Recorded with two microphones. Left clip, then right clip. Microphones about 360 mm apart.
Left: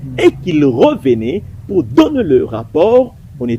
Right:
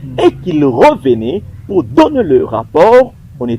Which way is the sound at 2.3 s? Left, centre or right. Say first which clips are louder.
Right 1 dB; right.